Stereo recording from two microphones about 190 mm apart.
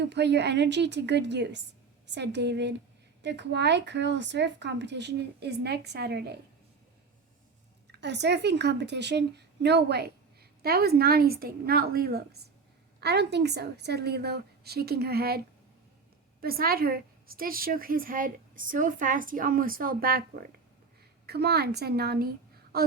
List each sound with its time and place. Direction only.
0.0 s speech: 65° right (ahead or behind)
8.0 s a woman's voice: 65° right (ahead or behind)
16.4 s a woman's voice: 50° right (ahead or behind)